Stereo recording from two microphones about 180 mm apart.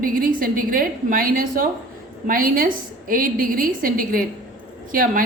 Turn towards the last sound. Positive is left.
turn(degrees=-50)  # may be behind; listen again after turning